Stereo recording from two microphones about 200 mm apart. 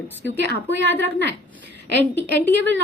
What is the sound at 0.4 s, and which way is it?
Speech, 60° right (ahead or behind).